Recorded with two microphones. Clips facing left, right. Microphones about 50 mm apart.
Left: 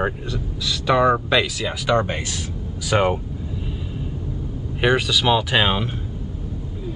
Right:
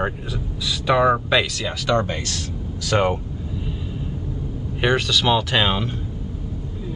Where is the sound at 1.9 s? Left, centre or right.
Centre.